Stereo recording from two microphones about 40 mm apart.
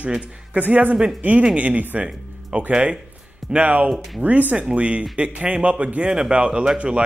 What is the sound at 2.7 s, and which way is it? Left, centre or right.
Speech, right.